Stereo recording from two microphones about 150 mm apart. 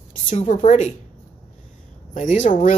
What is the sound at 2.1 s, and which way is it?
Speech, 55° left (ahead or behind).